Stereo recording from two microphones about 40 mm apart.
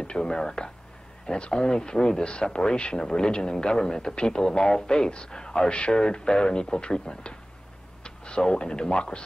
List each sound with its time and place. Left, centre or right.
0.0 s speech: left